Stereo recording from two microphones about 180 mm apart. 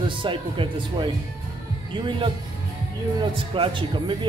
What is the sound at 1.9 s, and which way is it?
Speech, 30° right (ahead or behind).